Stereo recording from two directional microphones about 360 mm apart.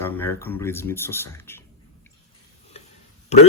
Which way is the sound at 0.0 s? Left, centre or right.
Centre.